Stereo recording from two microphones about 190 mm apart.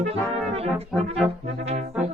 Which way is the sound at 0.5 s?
30° right (ahead or behind).